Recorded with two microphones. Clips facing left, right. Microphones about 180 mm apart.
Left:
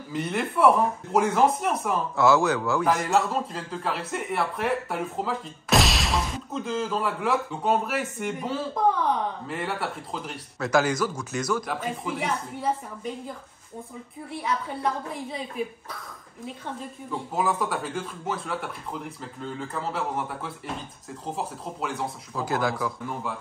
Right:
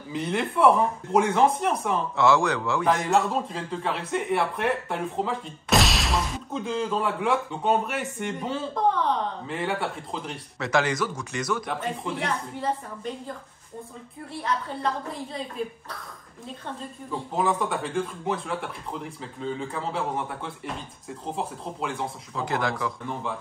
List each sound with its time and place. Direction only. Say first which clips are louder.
0.1 s speech: right 1 dB; centre (ahead or behind)
17.1 s speech: right 1 dB; 5° left (ahead or behind)